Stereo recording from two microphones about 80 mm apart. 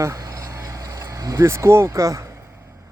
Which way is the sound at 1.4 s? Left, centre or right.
Right.